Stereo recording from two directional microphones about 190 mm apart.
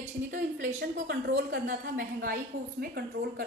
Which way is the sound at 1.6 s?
50° right (ahead or behind).